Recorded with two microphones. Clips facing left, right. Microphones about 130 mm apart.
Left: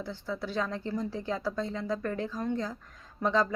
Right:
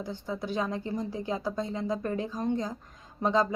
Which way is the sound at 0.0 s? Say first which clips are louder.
Right 1 dB; 15° right (ahead or behind).